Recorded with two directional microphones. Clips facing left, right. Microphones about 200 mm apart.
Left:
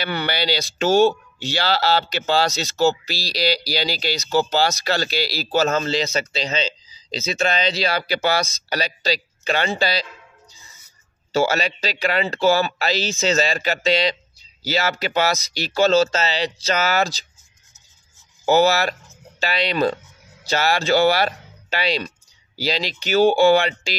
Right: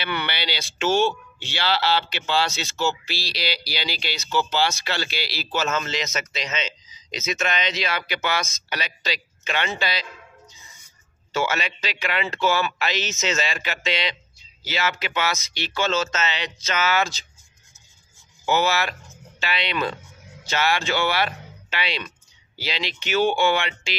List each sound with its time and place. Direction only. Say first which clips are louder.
0.0 s speech: left 5 dB; 40° left (ahead or behind)
11.3 s speech: left 5 dB; 35° left (ahead or behind)
18.4 s speech: left 6 dB; 40° left (ahead or behind)